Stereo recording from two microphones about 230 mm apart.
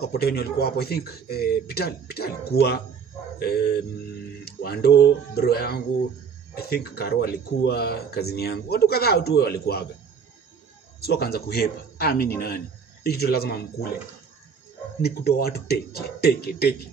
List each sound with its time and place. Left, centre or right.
0.0 s speech: left
11.0 s speech: left
15.0 s speech: left